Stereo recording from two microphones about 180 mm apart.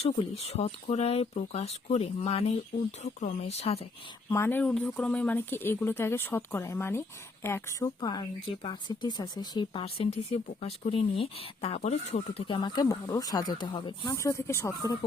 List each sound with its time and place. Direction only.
0.0 s speech: 35° left (ahead or behind)
4.3 s speech: 15° left (ahead or behind)